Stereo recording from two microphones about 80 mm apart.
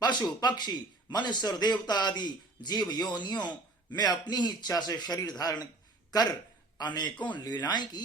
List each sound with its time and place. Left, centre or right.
0.0 s a man's voice: left